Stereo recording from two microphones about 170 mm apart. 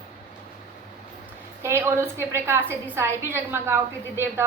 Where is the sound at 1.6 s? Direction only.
15° right (ahead or behind).